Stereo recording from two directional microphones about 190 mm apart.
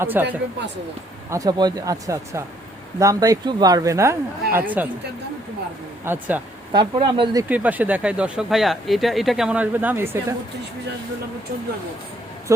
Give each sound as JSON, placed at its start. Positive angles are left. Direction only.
{"t": 0.0, "sound": "speech", "side_deg": -10}
{"t": 1.3, "sound": "speech", "side_deg": -20}
{"t": 6.1, "sound": "speech", "side_deg": -10}
{"t": 6.7, "sound": "speech", "side_deg": -25}
{"t": 7.4, "sound": "speech", "side_deg": -10}
{"t": 12.5, "sound": "speech", "side_deg": -15}